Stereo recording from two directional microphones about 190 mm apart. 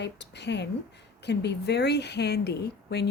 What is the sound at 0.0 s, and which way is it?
A woman's voice, 65° left (ahead or behind).